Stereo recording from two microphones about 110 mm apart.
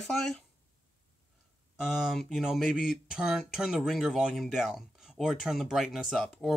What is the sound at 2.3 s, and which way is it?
Speech, centre (ahead or behind).